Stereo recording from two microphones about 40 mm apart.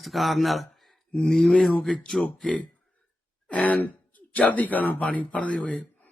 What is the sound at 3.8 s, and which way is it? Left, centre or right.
Speech, left.